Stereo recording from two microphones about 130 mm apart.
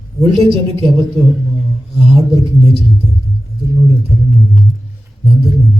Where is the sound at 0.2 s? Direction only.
45° right (ahead or behind).